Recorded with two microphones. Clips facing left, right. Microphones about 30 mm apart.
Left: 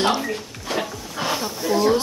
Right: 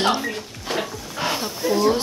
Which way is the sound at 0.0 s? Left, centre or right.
Centre.